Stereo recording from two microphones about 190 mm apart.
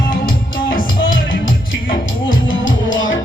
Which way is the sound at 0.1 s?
50° left (ahead or behind).